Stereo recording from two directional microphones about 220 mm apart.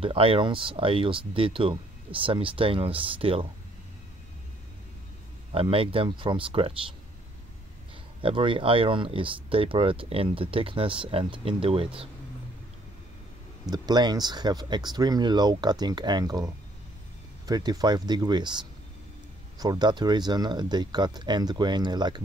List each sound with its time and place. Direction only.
0.0 s speech: 25° right (ahead or behind)
5.5 s speech: 25° right (ahead or behind)
8.2 s speech: 25° right (ahead or behind)
13.7 s speech: 20° right (ahead or behind)
19.6 s speech: 20° right (ahead or behind)